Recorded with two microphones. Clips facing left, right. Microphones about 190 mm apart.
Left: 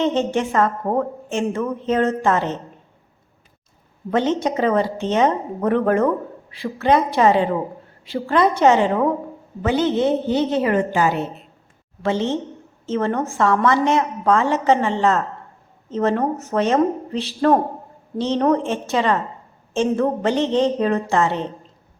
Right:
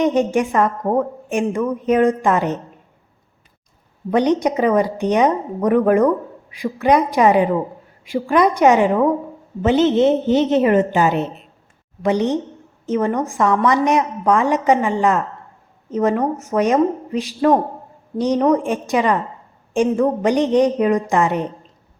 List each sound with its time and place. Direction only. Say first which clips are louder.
0.0 s a woman's voice: right 3 dB; 15° right (ahead or behind)
4.1 s a woman's voice: right 3 dB; 15° right (ahead or behind)